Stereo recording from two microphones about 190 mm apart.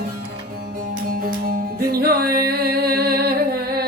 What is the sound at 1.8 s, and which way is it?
Music, 55° right (ahead or behind).